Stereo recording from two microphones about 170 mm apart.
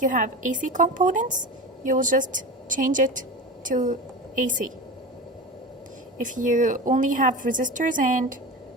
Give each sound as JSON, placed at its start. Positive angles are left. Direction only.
{"t": 0.0, "sound": "a woman's voice", "side_deg": -50}
{"t": 6.1, "sound": "a woman's voice", "side_deg": -50}